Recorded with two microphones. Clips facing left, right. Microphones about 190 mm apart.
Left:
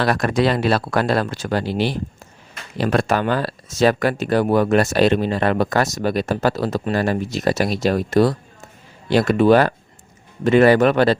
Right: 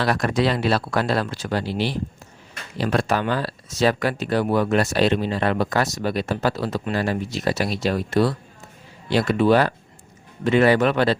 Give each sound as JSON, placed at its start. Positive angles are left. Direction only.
{"t": 0.0, "sound": "speech", "side_deg": 55}